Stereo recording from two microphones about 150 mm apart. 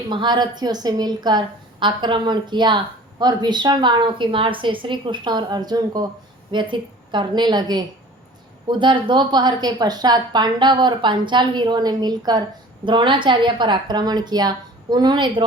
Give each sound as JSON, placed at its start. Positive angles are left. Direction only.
{"t": 0.1, "sound": "a woman's voice", "side_deg": -30}